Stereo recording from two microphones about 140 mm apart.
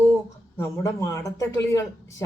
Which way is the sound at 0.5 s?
20° left (ahead or behind).